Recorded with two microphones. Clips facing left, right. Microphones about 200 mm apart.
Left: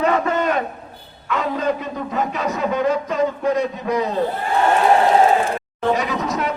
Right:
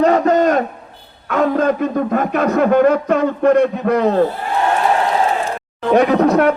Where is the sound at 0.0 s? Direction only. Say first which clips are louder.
Right 6 dB; 40° right (ahead or behind).